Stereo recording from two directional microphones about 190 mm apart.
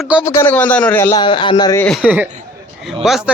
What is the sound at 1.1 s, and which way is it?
Speech, 25° left (ahead or behind).